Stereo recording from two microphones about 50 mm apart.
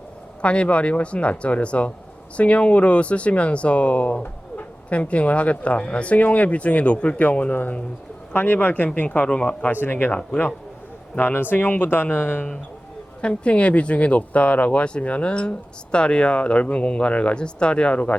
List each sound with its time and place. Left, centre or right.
0.4 s speech: left
9.0 s speech: left
9.8 s speech: left
10.1 s speech: left
11.2 s speech: left
13.2 s speech: left